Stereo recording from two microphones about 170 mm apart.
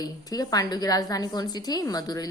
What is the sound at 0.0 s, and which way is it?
A woman's voice, 20° left (ahead or behind).